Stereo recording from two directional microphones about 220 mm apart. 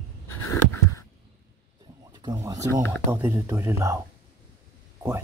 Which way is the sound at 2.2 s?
15° right (ahead or behind).